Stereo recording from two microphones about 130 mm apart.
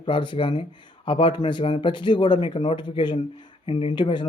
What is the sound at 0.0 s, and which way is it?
Speech, 40° left (ahead or behind).